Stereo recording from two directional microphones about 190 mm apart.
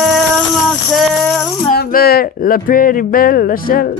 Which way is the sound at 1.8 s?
55° left (ahead or behind).